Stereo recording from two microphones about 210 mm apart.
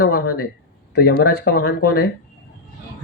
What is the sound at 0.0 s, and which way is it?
Speech, 50° left (ahead or behind).